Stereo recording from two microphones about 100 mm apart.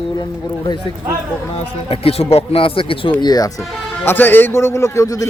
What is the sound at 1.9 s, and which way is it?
Speech, 75° left (ahead or behind).